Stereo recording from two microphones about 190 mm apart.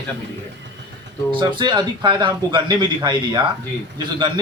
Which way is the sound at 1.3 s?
25° right (ahead or behind).